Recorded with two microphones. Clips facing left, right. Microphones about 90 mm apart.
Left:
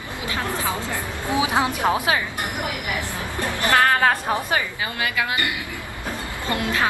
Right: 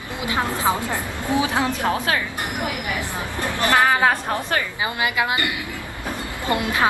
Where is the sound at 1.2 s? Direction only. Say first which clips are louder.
Even; 15° left (ahead or behind).